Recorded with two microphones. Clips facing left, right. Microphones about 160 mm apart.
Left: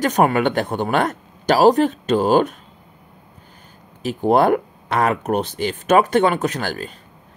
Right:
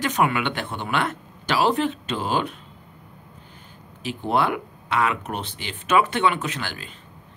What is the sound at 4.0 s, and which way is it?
Speech, 45° left (ahead or behind).